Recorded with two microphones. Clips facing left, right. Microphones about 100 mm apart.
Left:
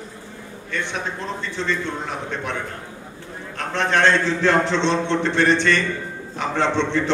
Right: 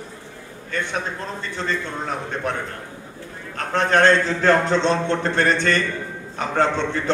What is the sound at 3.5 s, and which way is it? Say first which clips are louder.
A man's voice: right 2 dB; 45° right (ahead or behind).